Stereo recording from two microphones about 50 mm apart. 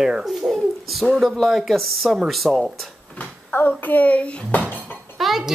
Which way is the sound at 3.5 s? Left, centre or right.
Left.